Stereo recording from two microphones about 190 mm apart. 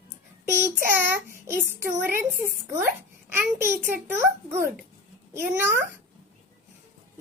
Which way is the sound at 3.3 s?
10° right (ahead or behind).